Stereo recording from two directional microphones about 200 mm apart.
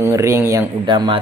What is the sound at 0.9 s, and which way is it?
Speech, 25° right (ahead or behind).